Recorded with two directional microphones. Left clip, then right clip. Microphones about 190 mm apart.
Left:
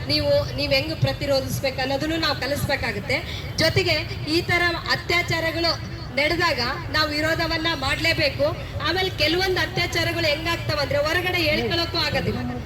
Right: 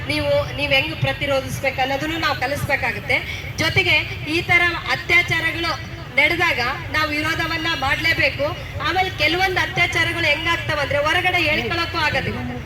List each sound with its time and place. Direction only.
0.6 s a woman's voice: 35° right (ahead or behind)